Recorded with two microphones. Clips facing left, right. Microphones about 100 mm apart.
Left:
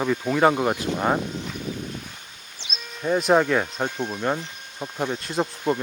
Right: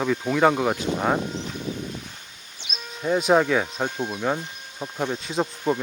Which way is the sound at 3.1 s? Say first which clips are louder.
Even; centre (ahead or behind).